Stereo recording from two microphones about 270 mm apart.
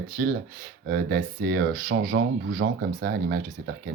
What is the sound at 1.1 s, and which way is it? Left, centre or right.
Speech, right.